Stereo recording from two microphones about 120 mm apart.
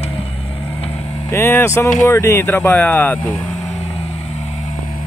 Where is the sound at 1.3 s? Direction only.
20° left (ahead or behind).